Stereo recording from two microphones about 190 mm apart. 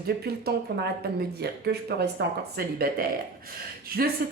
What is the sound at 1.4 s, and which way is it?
A woman's voice, 60° right (ahead or behind).